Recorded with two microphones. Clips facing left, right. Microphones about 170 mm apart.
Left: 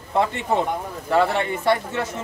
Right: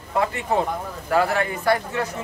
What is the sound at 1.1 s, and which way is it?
Speech, 25° left (ahead or behind).